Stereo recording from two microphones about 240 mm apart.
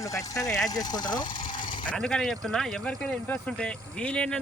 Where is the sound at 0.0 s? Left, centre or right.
Centre.